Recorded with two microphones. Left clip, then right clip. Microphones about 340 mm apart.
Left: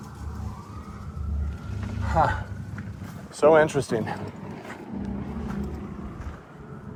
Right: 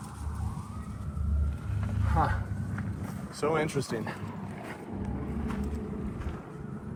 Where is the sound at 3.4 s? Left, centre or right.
Left.